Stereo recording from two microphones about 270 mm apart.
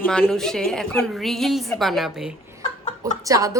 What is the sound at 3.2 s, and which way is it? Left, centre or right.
Speech, centre.